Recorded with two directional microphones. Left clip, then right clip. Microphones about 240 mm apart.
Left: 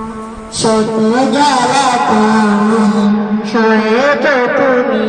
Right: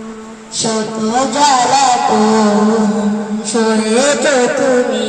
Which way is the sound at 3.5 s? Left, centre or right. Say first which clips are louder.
Left 2 dB; right.